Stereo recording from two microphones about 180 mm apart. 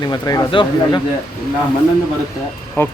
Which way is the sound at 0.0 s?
20° left (ahead or behind).